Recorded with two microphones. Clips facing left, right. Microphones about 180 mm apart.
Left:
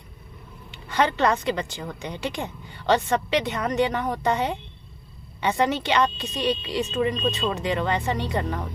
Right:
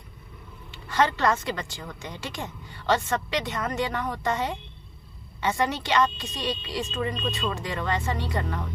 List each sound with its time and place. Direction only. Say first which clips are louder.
0.7 s a woman's voice: left 1 dB; 20° left (ahead or behind)